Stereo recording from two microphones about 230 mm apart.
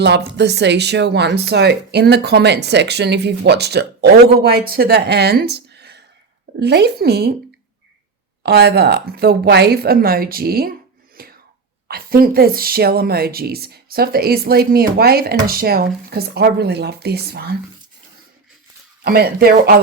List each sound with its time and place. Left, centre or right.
0.0 s a woman's voice: right
8.4 s speech: right
11.2 s a sound: right
11.9 s a woman's voice: right
19.0 s a woman's voice: right